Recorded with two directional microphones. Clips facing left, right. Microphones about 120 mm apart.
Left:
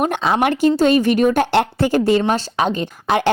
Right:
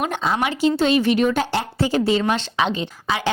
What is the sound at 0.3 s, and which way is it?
Speech, 50° left (ahead or behind).